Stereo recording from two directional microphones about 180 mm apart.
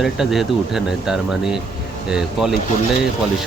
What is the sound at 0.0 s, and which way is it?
Speech, centre (ahead or behind).